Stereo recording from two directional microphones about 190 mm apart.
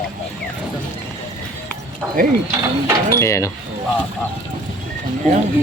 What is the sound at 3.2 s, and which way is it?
Speech, 15° left (ahead or behind).